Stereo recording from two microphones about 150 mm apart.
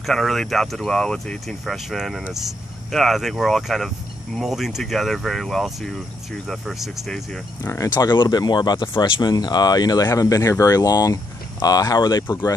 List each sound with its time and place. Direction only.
0.0 s speech: centre (ahead or behind)
7.6 s speech: 20° left (ahead or behind)